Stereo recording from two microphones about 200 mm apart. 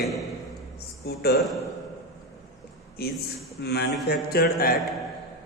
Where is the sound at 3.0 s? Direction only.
50° left (ahead or behind).